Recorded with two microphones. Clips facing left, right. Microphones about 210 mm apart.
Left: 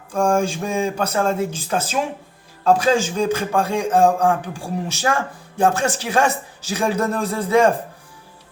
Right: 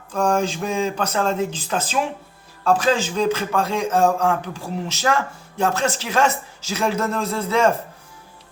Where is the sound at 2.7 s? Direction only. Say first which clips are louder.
Right 2 dB; 15° left (ahead or behind).